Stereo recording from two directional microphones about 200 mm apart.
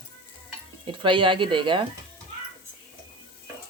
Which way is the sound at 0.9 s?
25° right (ahead or behind).